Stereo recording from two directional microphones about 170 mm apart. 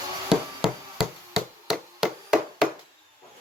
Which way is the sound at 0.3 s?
Centre (ahead or behind).